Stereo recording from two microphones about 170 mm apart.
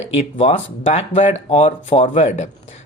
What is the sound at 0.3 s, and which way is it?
Speech, 40° left (ahead or behind).